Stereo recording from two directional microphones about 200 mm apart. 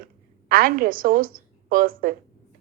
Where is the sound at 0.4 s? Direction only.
45° right (ahead or behind).